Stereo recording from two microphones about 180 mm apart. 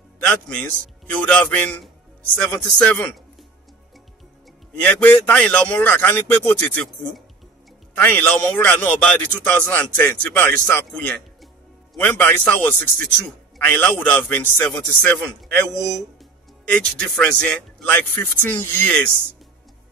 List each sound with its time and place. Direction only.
0.2 s a man's voice: 5° left (ahead or behind)
4.8 s a man's voice: 10° left (ahead or behind)